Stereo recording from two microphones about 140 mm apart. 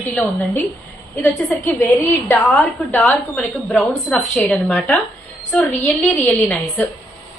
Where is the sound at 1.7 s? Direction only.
15° left (ahead or behind).